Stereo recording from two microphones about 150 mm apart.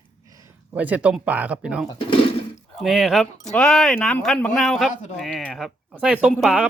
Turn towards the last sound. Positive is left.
turn(degrees=0)  # may be behind; listen again after turning